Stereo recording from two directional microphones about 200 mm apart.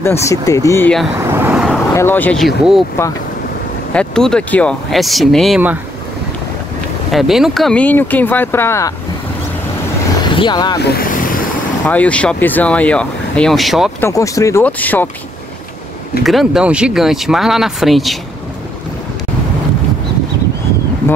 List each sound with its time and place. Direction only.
0.0 s speech: 15° left (ahead or behind)
1.3 s vehicle: 5° right (ahead or behind)
2.0 s speech: 10° left (ahead or behind)
3.9 s speech: 5° left (ahead or behind)
7.1 s speech: centre (ahead or behind)
10.2 s speech: 25° left (ahead or behind)
10.8 s vehicle: 50° left (ahead or behind)
11.8 s speech: 5° left (ahead or behind)
14.0 s speech: 15° left (ahead or behind)
16.3 s speech: centre (ahead or behind)